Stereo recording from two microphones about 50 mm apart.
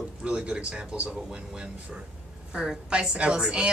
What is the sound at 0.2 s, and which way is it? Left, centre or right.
Speech, right.